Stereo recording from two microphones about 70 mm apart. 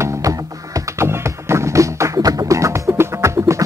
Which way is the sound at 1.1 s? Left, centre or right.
Right.